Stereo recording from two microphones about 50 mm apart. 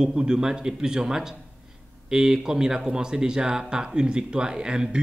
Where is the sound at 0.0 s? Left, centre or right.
Centre.